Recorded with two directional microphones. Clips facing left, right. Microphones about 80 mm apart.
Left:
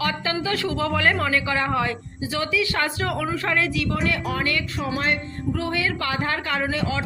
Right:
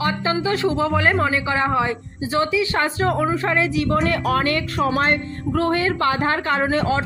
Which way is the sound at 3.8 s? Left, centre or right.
Right.